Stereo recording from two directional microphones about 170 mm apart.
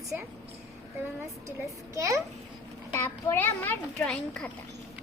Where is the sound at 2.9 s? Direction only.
15° left (ahead or behind).